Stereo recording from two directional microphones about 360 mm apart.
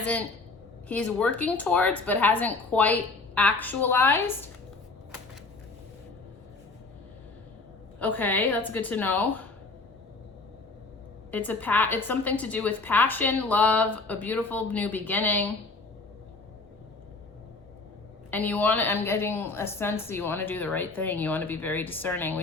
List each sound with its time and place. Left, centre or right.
0.0 s a woman's voice: centre
7.9 s a woman's voice: centre
11.3 s a woman's voice: centre
18.3 s a woman's voice: centre